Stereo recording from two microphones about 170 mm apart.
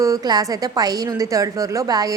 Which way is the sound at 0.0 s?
20° right (ahead or behind).